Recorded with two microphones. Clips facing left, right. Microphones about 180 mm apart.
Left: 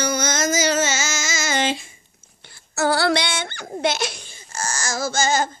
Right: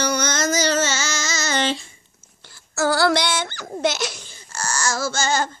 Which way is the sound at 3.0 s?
60° left (ahead or behind).